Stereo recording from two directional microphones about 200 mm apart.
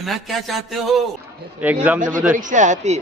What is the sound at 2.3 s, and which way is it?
Speech, 40° right (ahead or behind).